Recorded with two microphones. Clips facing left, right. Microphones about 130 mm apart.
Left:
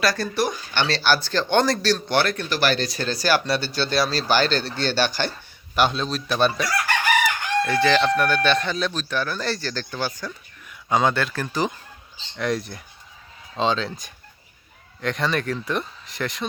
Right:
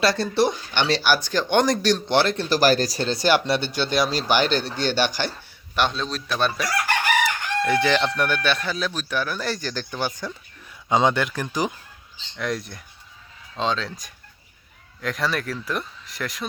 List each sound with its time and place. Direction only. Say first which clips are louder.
0.0 s speech: right 3 dB; 25° right (ahead or behind)
2.5 s speech: right 4 dB; 40° right (ahead or behind)
3.0 s speech: right 2 dB; 25° right (ahead or behind)
5.7 s speech: left 2 dB; 5° left (ahead or behind)
7.6 s speech: left 1 dB; 15° right (ahead or behind)
12.4 s speech: left 3 dB; centre (ahead or behind)
15.0 s speech: left 2 dB; centre (ahead or behind)